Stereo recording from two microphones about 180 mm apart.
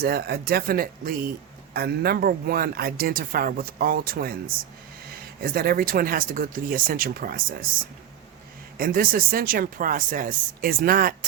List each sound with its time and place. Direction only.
0.0 s speech: 60° right (ahead or behind)
8.8 s speech: 50° right (ahead or behind)